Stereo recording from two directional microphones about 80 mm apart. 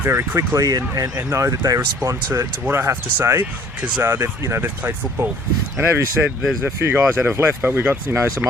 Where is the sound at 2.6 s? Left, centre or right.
Right.